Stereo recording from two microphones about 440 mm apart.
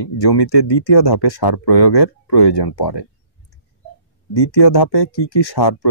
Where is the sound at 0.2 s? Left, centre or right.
Left.